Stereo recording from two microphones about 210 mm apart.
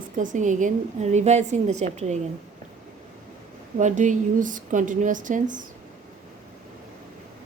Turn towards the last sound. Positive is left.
turn(degrees=-40)  # may be behind; listen again after turning